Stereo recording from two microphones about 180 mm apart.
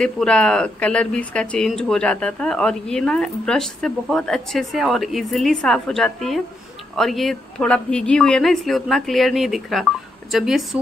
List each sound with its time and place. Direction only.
0.0 s speech: 5° left (ahead or behind)